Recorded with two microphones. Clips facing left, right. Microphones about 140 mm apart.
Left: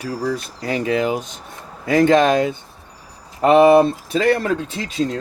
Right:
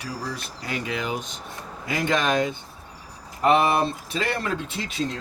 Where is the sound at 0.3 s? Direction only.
40° left (ahead or behind).